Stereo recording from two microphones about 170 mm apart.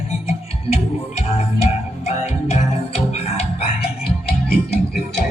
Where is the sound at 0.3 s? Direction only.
40° left (ahead or behind).